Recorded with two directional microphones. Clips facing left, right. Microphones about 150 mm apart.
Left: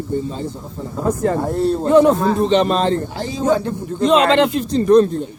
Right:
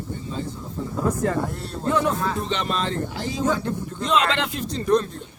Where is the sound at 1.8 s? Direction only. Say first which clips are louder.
Left 9 dB; 25° left (ahead or behind).